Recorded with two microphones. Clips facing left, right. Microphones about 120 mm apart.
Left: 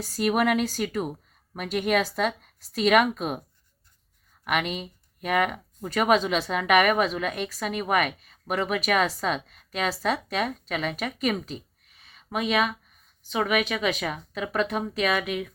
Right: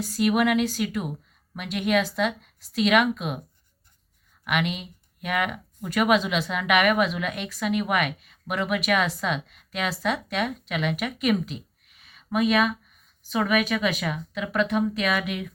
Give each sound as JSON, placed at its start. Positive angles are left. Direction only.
{"t": 0.2, "sound": "a woman's voice", "side_deg": 40}
{"t": 4.4, "sound": "speech", "side_deg": 40}